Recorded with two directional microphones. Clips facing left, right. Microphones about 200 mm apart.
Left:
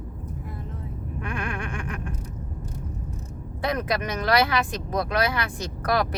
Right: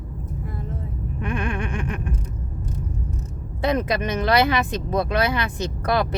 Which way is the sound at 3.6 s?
25° right (ahead or behind).